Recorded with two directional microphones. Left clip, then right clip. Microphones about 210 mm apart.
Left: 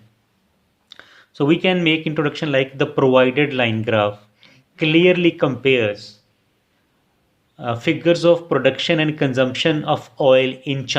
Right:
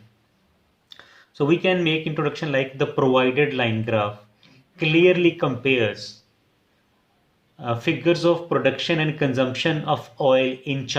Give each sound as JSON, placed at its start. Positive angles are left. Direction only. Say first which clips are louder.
{"t": 0.9, "sound": "speech", "louder": "left 3 dB", "side_deg": 40}
{"t": 7.5, "sound": "speech", "louder": "left 3 dB", "side_deg": 35}